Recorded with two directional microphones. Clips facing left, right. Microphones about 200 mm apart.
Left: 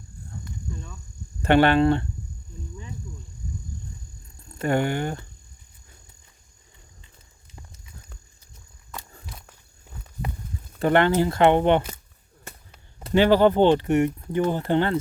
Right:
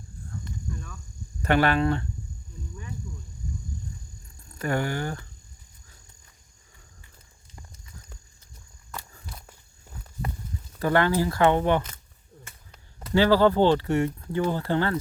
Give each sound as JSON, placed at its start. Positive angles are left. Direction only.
{"t": 1.4, "sound": "speech", "side_deg": 25}
{"t": 4.5, "sound": "speech", "side_deg": 25}
{"t": 10.8, "sound": "speech", "side_deg": 25}
{"t": 13.0, "sound": "speech", "side_deg": 25}